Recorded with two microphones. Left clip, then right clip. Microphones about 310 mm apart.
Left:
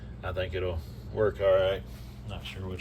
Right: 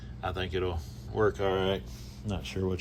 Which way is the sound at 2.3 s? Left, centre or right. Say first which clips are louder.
Right 7 dB; centre.